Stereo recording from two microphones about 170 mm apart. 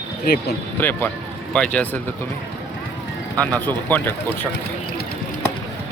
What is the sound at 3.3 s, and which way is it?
Speech, 10° left (ahead or behind).